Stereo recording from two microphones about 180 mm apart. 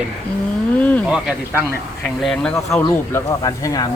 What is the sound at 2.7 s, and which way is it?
Speech, 15° left (ahead or behind).